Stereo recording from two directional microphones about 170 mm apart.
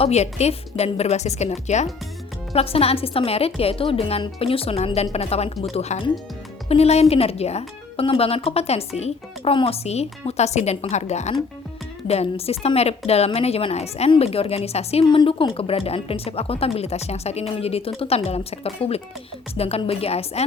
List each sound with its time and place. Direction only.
0.0 s speech: 40° left (ahead or behind)